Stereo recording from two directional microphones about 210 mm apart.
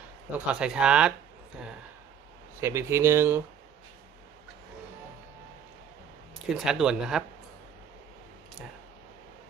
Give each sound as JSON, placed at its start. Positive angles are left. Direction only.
{"t": 0.3, "sound": "speech", "side_deg": -5}
{"t": 2.6, "sound": "speech", "side_deg": -10}
{"t": 6.4, "sound": "speech", "side_deg": -5}